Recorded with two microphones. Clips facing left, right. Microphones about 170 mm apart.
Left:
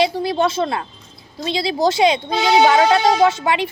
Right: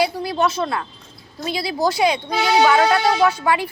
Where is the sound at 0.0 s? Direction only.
25° left (ahead or behind).